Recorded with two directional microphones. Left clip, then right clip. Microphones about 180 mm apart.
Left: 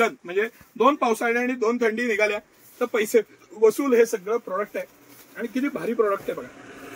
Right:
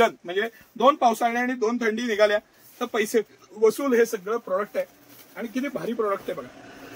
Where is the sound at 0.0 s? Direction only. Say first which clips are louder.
Right 1 dB; 30° right (ahead or behind).